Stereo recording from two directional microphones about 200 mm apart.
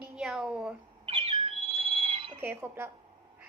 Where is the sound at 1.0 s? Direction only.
25° right (ahead or behind).